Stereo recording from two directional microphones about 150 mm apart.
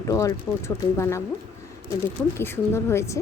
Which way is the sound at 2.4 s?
15° left (ahead or behind).